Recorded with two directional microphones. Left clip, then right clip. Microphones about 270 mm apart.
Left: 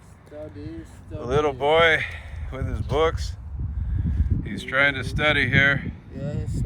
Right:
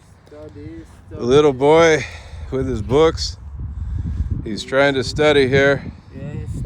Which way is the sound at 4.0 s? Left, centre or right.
Centre.